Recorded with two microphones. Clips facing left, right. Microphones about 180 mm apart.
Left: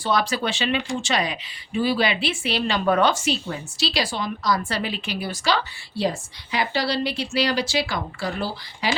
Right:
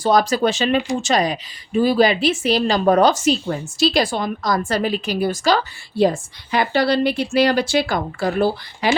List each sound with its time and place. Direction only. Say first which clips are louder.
0.0 s a woman's voice: right 7 dB; 40° right (ahead or behind)